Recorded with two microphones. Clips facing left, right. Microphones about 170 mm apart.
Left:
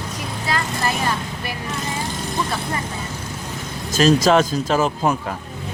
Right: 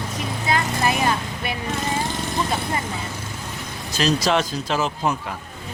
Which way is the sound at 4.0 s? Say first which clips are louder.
Left 6 dB; 45° left (ahead or behind).